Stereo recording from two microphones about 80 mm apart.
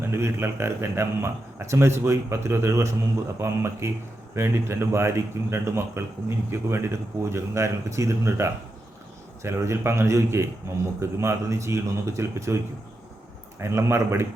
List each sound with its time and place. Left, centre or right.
0.1 s a man's voice: right